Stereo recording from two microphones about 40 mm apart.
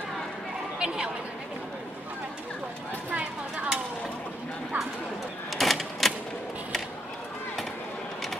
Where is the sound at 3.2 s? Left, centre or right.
Right.